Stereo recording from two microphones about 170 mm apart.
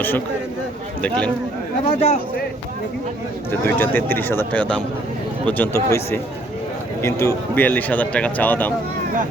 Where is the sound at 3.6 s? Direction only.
10° left (ahead or behind).